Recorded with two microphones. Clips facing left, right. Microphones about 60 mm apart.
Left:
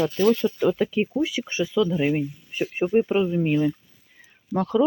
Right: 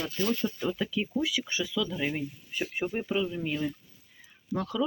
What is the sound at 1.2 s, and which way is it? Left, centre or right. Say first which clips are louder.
Speech: left 6 dB; left.